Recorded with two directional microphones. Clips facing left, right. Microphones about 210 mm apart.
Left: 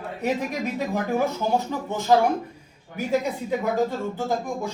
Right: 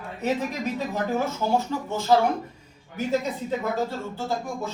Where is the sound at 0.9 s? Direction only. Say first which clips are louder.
Left 3 dB; 15° left (ahead or behind).